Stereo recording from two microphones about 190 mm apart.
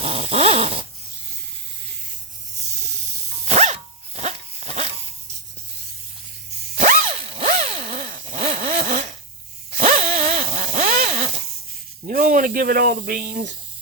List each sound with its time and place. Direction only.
0.0 s dog: 30° right (ahead or behind)
3.4 s dog: 35° right (ahead or behind)
6.7 s a sound: 45° right (ahead or behind)
7.2 s zipper: 30° right (ahead or behind)
8.2 s vehicle: 35° right (ahead or behind)
9.7 s dog: 35° right (ahead or behind)
10.2 s a sound: 35° right (ahead or behind)
12.0 s speech: 45° right (ahead or behind)